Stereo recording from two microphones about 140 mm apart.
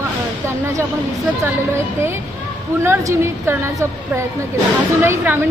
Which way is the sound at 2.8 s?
20° right (ahead or behind).